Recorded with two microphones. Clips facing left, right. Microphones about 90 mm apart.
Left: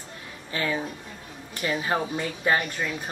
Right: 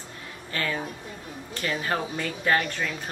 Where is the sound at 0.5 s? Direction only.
15° left (ahead or behind).